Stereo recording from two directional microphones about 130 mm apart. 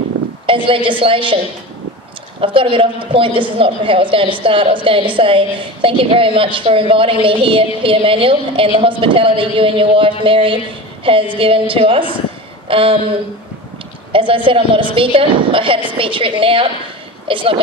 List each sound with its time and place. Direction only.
0.5 s a woman's voice: 45° right (ahead or behind)
2.4 s a woman's voice: 45° right (ahead or behind)
14.1 s a woman's voice: 40° right (ahead or behind)